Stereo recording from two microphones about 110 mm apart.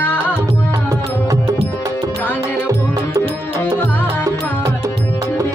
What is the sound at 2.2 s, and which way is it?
Music, 15° left (ahead or behind).